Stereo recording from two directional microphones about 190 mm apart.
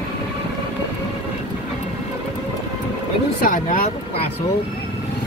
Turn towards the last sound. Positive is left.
turn(degrees=40)  # may be behind; listen again after turning